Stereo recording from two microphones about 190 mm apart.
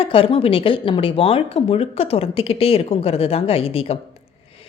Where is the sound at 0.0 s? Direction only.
30° left (ahead or behind).